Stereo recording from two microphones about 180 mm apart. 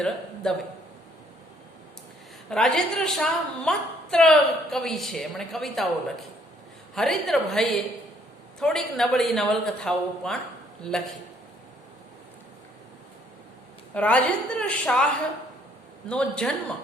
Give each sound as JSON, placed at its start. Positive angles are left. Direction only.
{"t": 0.4, "sound": "a woman's voice", "side_deg": 5}
{"t": 2.5, "sound": "a woman's voice", "side_deg": 5}
{"t": 13.9, "sound": "a woman's voice", "side_deg": 5}